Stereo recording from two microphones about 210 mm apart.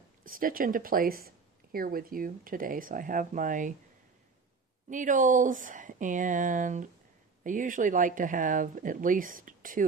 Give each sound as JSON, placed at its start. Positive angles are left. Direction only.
{"t": 0.3, "sound": "speech", "side_deg": -40}
{"t": 4.9, "sound": "speech", "side_deg": -40}